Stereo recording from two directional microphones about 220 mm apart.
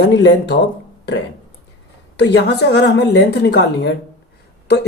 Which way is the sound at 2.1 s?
50° left (ahead or behind).